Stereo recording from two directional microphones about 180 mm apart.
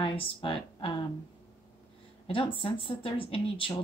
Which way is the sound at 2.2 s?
30° left (ahead or behind).